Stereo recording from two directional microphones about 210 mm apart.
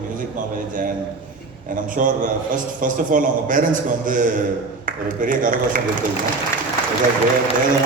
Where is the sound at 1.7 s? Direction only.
40° right (ahead or behind).